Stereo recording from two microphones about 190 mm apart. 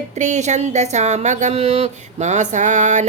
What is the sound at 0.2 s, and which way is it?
Speech, 40° right (ahead or behind).